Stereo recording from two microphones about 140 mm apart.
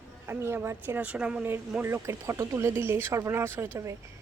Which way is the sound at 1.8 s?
15° right (ahead or behind).